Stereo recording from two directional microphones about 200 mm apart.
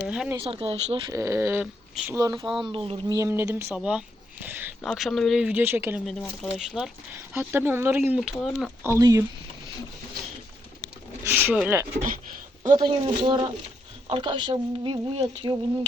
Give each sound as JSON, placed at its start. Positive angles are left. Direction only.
{"t": 0.0, "sound": "speech", "side_deg": -5}
{"t": 0.4, "sound": "speech", "side_deg": -30}
{"t": 1.1, "sound": "speech", "side_deg": -15}
{"t": 2.6, "sound": "speech", "side_deg": -25}
{"t": 3.2, "sound": "speech", "side_deg": -15}
{"t": 3.8, "sound": "a sound", "side_deg": -5}
{"t": 4.8, "sound": "speech", "side_deg": 0}
{"t": 6.1, "sound": "speech", "side_deg": 0}
{"t": 8.8, "sound": "speech", "side_deg": -15}
{"t": 11.2, "sound": "a sound", "side_deg": -10}
{"t": 12.8, "sound": "speech", "side_deg": -25}